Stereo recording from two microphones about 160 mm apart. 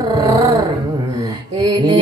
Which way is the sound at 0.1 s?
20° right (ahead or behind).